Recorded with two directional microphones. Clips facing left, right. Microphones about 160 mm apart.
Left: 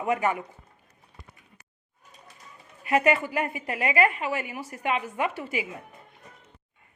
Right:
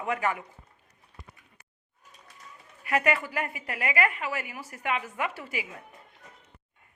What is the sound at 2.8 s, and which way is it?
A woman's voice, 25° left (ahead or behind).